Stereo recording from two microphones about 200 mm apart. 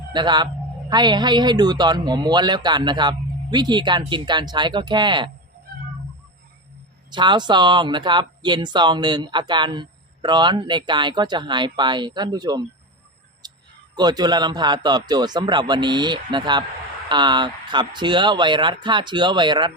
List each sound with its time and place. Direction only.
0.1 s speech: 20° right (ahead or behind)
7.1 s speech: 20° right (ahead or behind)
13.4 s a sound: 20° right (ahead or behind)
13.9 s speech: 20° right (ahead or behind)